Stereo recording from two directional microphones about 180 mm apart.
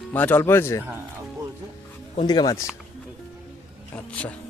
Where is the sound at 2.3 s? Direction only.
20° left (ahead or behind).